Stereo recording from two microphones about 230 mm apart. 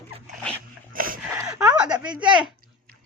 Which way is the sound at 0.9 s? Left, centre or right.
Right.